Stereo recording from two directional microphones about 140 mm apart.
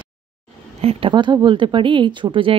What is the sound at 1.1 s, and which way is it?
Speech, 25° right (ahead or behind).